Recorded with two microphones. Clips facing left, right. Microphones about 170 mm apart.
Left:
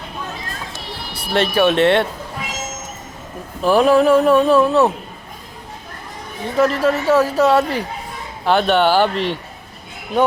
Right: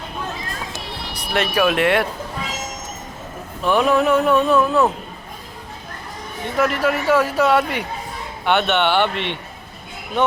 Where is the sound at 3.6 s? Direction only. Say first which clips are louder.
Left 4 dB; 35° left (ahead or behind).